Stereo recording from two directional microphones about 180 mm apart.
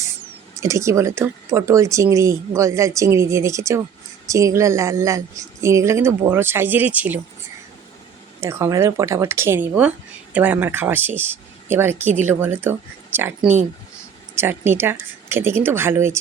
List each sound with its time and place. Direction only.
0.6 s speech: 15° right (ahead or behind)
8.4 s speech: 15° right (ahead or behind)